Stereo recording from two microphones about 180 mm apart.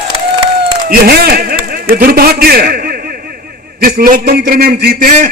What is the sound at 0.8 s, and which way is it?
A man's voice, 55° right (ahead or behind).